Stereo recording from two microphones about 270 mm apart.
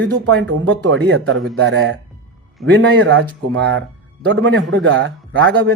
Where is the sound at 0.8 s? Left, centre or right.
Right.